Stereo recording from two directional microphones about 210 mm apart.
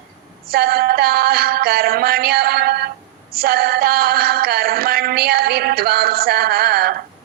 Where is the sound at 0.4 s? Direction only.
45° right (ahead or behind).